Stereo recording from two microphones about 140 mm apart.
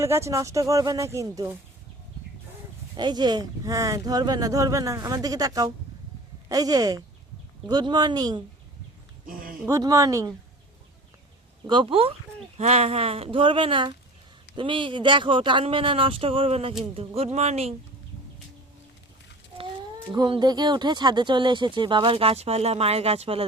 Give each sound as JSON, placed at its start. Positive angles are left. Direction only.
{"t": 0.0, "sound": "speech", "side_deg": -20}
{"t": 2.9, "sound": "speech", "side_deg": -30}
{"t": 9.2, "sound": "a sound", "side_deg": -90}
{"t": 9.6, "sound": "speech", "side_deg": -25}
{"t": 11.6, "sound": "speech", "side_deg": -35}
{"t": 19.5, "sound": "speech", "side_deg": -35}